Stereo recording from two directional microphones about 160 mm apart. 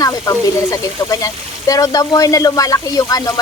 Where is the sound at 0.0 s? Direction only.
20° left (ahead or behind).